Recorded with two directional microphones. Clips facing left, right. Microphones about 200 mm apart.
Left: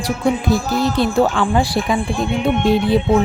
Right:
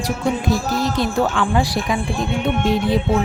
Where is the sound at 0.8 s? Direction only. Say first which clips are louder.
Left 4 dB; 30° left (ahead or behind).